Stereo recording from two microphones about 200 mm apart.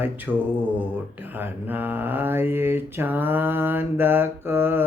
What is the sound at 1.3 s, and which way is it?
Mantra, 10° right (ahead or behind).